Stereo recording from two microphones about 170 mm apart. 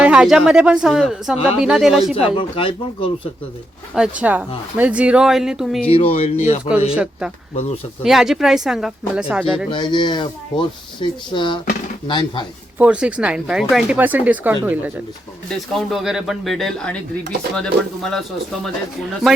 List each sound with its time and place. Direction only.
0.0 s speech: 5° right (ahead or behind)
2.3 s speech: 30° left (ahead or behind)
3.9 s speech: 5° right (ahead or behind)
5.9 s speech: 35° left (ahead or behind)
6.9 s speech: 5° right (ahead or behind)
9.6 s speech: 30° left (ahead or behind)
12.8 s speech: 5° right (ahead or behind)
15.7 s speech: centre (ahead or behind)